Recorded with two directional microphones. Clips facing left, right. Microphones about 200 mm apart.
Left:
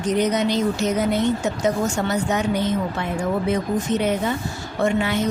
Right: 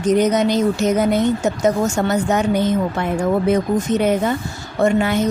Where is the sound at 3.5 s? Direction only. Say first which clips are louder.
Right 4 dB; 50° right (ahead or behind).